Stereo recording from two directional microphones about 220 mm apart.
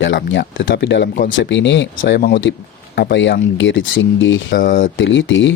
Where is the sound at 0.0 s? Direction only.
55° left (ahead or behind).